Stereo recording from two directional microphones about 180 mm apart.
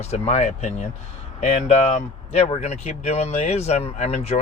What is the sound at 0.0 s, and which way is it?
Speech, 35° left (ahead or behind).